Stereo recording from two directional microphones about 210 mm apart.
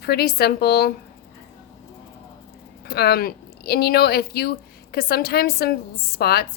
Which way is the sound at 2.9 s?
50° left (ahead or behind).